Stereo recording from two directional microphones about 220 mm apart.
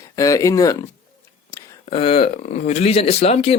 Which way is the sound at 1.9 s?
25° left (ahead or behind).